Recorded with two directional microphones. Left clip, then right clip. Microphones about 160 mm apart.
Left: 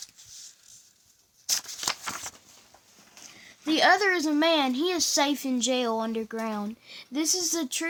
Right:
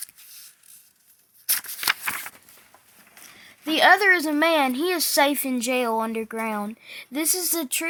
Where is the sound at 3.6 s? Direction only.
10° right (ahead or behind).